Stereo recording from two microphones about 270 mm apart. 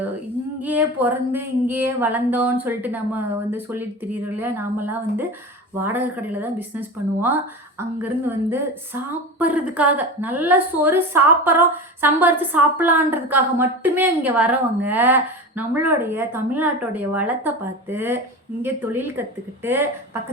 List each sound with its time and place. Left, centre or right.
0.6 s a woman's voice: centre